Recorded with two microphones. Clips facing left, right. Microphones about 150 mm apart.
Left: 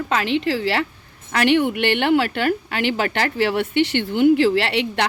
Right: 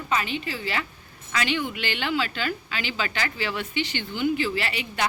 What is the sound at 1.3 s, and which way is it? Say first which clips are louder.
A woman's voice: left 10 dB; 65° left (ahead or behind).